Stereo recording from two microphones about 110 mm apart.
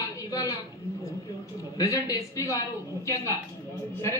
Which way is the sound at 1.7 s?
30° left (ahead or behind).